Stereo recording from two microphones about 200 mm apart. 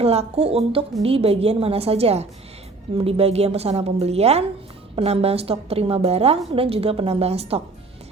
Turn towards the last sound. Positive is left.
turn(degrees=-30)  # may be behind; listen again after turning